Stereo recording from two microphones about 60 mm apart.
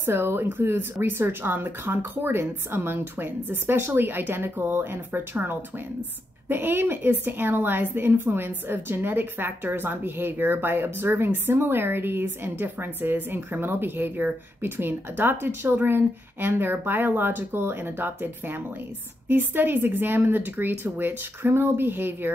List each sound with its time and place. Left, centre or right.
0.0 s a woman's voice: right